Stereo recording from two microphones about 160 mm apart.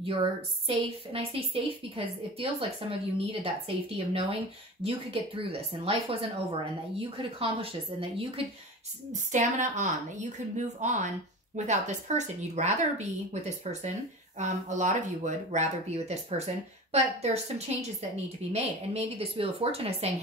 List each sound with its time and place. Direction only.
0.0 s a woman's voice: 30° right (ahead or behind)
9.3 s a woman's voice: 50° right (ahead or behind)